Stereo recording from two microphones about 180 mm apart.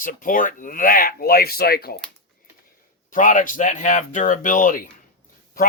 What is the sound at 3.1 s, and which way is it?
Speech, 50° left (ahead or behind).